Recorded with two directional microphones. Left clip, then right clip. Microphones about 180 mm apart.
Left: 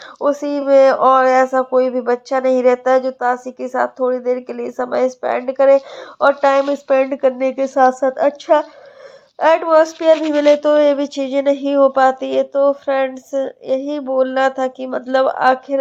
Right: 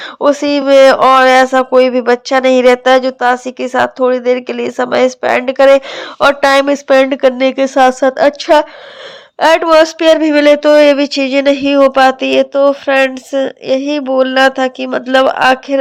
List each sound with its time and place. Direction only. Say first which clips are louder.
0.2 s speech: right 7 dB; 25° right (ahead or behind)
6.4 s speech: right 5 dB; 40° right (ahead or behind)
9.6 s speech: right 4 dB; 25° right (ahead or behind)
10.5 s speech: right 5 dB; 20° right (ahead or behind)